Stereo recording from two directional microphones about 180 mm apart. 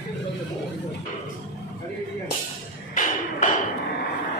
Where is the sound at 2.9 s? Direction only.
45° left (ahead or behind).